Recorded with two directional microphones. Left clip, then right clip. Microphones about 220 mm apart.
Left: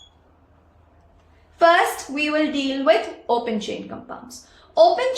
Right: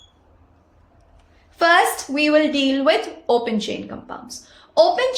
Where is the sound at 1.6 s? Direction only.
55° right (ahead or behind).